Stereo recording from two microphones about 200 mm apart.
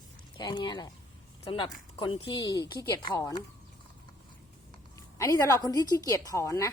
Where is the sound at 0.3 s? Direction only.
25° left (ahead or behind).